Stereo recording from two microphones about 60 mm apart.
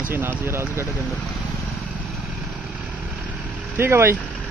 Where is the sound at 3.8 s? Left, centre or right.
Right.